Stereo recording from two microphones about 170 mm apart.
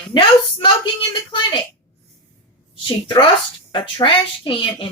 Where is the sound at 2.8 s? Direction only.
30° left (ahead or behind).